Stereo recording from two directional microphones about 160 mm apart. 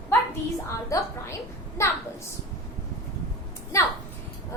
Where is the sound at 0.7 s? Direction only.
20° left (ahead or behind).